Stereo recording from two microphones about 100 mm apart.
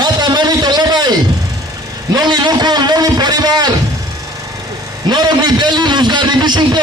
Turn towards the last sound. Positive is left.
turn(degrees=-50)  # may be behind; listen again after turning